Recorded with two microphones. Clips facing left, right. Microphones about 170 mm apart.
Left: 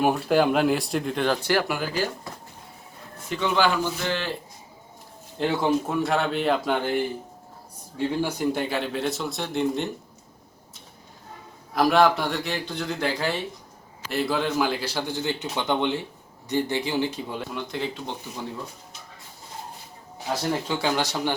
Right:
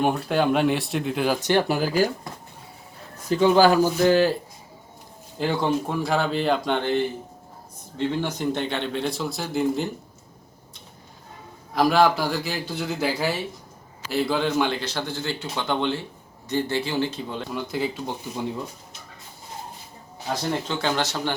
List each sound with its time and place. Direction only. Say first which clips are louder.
0.0 s speech: left 1 dB; centre (ahead or behind)
1.5 s speech: right 3 dB; 25° right (ahead or behind)
1.7 s speech: right 5 dB; 40° right (ahead or behind)
3.2 s speech: right 7 dB; 35° right (ahead or behind)
5.4 s speech: even; centre (ahead or behind)
11.7 s speech: even; centre (ahead or behind)
17.5 s speech: right 3 dB; 5° right (ahead or behind)
20.3 s speech: even; 5° left (ahead or behind)